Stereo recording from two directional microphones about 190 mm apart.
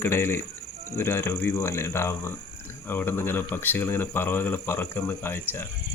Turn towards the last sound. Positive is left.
turn(degrees=10)  # may be behind; listen again after turning